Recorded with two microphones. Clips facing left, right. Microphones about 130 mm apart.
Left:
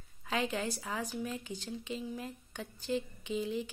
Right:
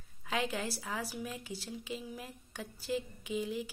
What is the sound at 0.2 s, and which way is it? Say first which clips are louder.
A woman's voice: left 1 dB; centre (ahead or behind).